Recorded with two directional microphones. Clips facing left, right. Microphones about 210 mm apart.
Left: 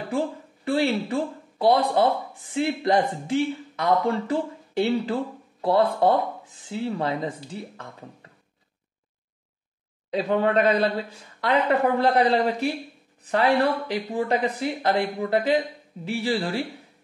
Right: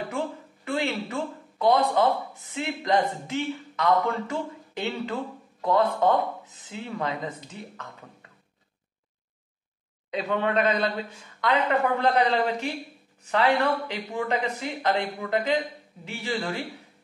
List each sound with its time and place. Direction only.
0.7 s speech: 35° left (ahead or behind)
10.1 s speech: 35° left (ahead or behind)